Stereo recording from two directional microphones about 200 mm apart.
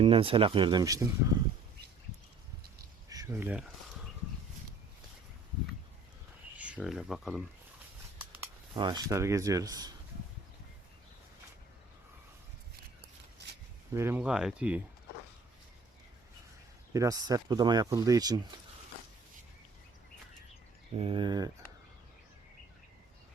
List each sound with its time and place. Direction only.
0.0 s speech: 25° right (ahead or behind)
3.1 s speech: 15° right (ahead or behind)
6.6 s speech: 5° right (ahead or behind)
8.2 s a sound: 10° right (ahead or behind)
8.7 s speech: 20° right (ahead or behind)
13.9 s speech: 10° right (ahead or behind)
16.9 s speech: 15° right (ahead or behind)
20.9 s speech: 25° right (ahead or behind)